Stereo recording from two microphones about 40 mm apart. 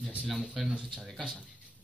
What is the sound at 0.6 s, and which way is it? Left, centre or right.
Speech, right.